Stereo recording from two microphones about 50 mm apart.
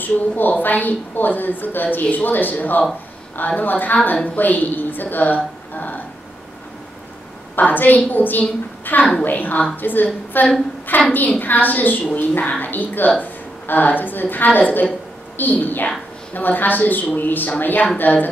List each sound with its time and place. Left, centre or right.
0.0 s a woman's voice: left
7.5 s a woman's voice: left